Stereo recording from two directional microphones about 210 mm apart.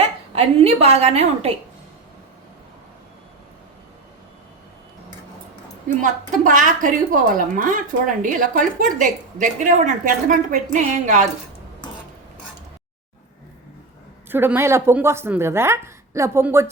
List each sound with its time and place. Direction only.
0.0 s a woman's voice: 30° right (ahead or behind)
6.0 s a woman's voice: 40° right (ahead or behind)
14.3 s a woman's voice: 10° right (ahead or behind)